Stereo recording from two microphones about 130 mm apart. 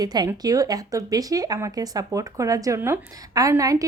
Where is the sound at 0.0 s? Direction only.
30° right (ahead or behind).